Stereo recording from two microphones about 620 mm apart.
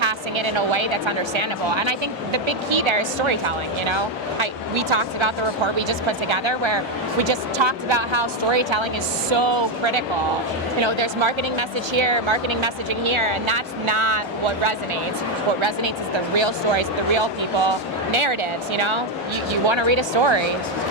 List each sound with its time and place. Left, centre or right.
0.0 s a woman's voice: right